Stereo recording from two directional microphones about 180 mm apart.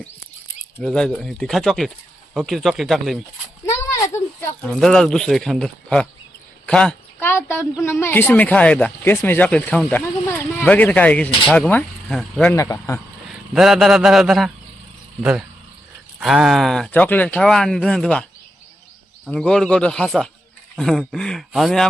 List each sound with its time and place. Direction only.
0.8 s speech: 5° left (ahead or behind)
3.7 s a sound: 15° left (ahead or behind)
4.6 s speech: 5° left (ahead or behind)
12.5 s speech: 15° left (ahead or behind)
13.5 s speech: centre (ahead or behind)